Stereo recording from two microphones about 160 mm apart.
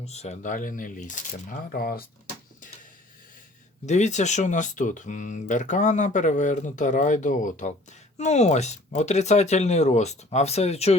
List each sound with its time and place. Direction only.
0.0 s speech: 45° left (ahead or behind); by 2.0 s 65° left (ahead or behind)
3.8 s speech: 45° left (ahead or behind)